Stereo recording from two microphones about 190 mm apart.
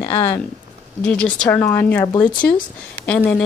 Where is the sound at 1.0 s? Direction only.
10° left (ahead or behind).